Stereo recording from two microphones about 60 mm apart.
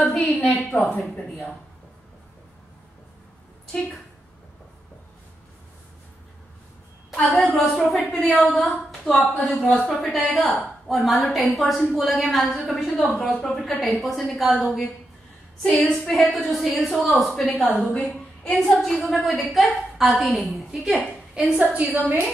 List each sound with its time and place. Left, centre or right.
0.0 s a woman's voice: centre
7.3 s a woman's voice: centre
21.5 s a woman's voice: centre